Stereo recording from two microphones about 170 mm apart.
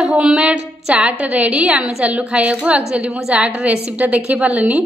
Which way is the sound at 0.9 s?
10° right (ahead or behind).